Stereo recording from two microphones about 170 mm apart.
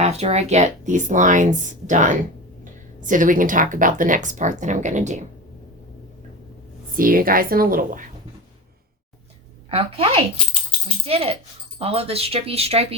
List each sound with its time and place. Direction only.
0.0 s speech: 40° right (ahead or behind)
6.9 s speech: 55° right (ahead or behind)
9.6 s speech: 35° right (ahead or behind)
10.3 s rattle: 30° left (ahead or behind)
11.0 s speech: 35° right (ahead or behind)